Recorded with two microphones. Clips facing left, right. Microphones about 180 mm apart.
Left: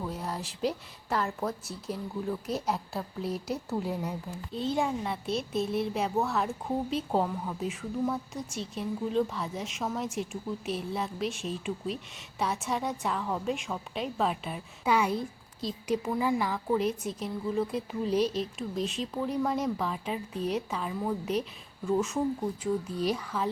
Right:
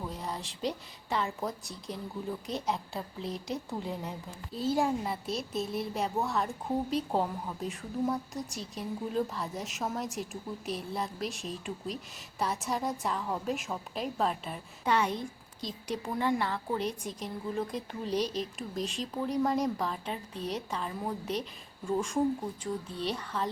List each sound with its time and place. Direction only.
0.0 s a woman's voice: 5° left (ahead or behind)
2.5 s a woman's voice: 5° left (ahead or behind)
22.9 s speech: 30° right (ahead or behind)
23.1 s speech: 5° left (ahead or behind)